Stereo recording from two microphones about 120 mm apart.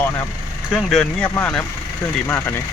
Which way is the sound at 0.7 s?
Centre (ahead or behind).